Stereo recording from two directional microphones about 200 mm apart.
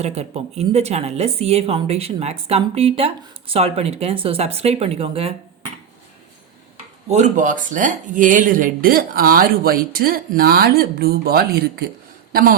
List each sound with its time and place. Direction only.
0.0 s speech: 30° right (ahead or behind)
7.1 s a man's voice: 40° right (ahead or behind)